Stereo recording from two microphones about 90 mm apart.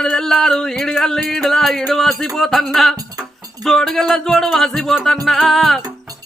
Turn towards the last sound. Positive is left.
turn(degrees=0)  # may be behind; listen again after turning